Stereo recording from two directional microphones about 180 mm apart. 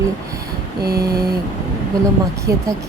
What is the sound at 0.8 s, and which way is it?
Mantra, 60° right (ahead or behind).